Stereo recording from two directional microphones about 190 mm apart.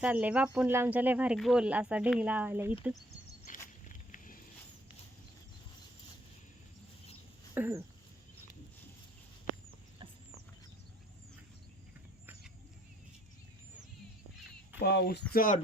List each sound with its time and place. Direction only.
0.0 s speech: 5° right (ahead or behind)
3.4 s walk: 40° left (ahead or behind)
7.5 s a sound: 10° right (ahead or behind)
14.8 s speech: 60° left (ahead or behind)
15.3 s speech: 45° left (ahead or behind)